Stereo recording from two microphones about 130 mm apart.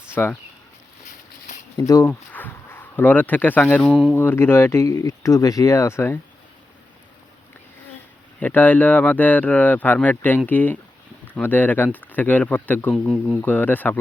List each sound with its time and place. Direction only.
0.1 s speech: 15° left (ahead or behind)
1.0 s a sound: 70° left (ahead or behind)
1.8 s speech: 25° left (ahead or behind)
8.4 s speech: 15° left (ahead or behind)